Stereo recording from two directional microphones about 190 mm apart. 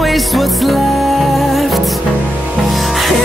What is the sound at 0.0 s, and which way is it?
Music, centre (ahead or behind).